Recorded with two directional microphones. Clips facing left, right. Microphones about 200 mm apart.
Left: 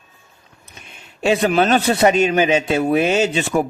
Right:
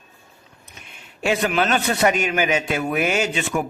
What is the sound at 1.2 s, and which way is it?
A man's voice, 30° left (ahead or behind).